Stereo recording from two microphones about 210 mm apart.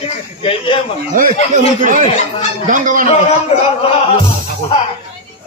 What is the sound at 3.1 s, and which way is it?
Speech, 30° left (ahead or behind).